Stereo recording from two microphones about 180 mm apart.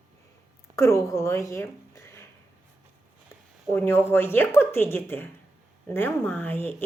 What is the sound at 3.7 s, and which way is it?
A woman's voice, 15° left (ahead or behind).